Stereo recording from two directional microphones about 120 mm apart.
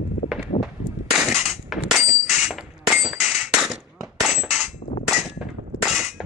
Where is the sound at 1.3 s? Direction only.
Centre (ahead or behind).